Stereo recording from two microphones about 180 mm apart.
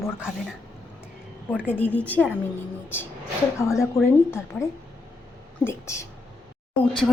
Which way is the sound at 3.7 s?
15° left (ahead or behind).